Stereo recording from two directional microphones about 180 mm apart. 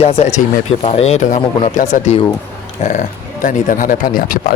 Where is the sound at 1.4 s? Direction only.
30° left (ahead or behind).